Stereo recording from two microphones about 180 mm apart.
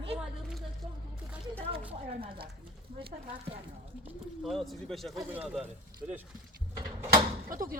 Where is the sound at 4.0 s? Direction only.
Centre (ahead or behind).